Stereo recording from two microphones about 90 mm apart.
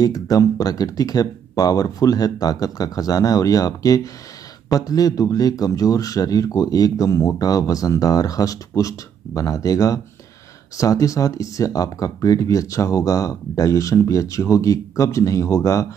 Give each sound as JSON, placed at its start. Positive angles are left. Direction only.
{"t": 0.0, "sound": "speech", "side_deg": 40}
{"t": 7.1, "sound": "speech", "side_deg": 30}
{"t": 7.3, "sound": "speech", "side_deg": 40}